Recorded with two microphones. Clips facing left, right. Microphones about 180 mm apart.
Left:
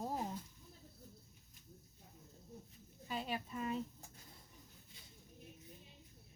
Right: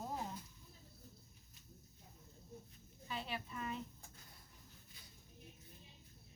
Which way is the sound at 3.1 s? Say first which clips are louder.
Left 3 dB; 45° left (ahead or behind).